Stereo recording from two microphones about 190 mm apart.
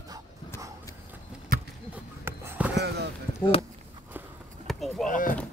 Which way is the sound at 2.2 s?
10° right (ahead or behind).